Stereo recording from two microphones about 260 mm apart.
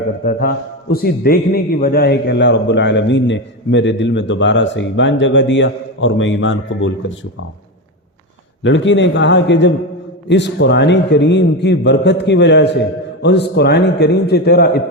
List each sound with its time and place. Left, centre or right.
0.3 s a man's voice: left
8.6 s a man's voice: left